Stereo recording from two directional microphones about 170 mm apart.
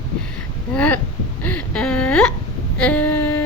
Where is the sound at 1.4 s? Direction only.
10° left (ahead or behind).